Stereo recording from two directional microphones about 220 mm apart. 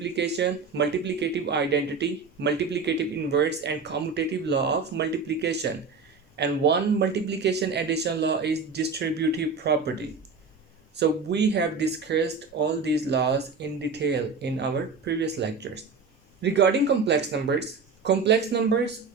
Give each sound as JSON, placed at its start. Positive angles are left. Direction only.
{"t": 0.0, "sound": "speech", "side_deg": -50}